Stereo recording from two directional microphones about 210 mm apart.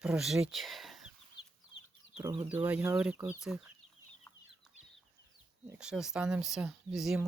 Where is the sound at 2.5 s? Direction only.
5° right (ahead or behind).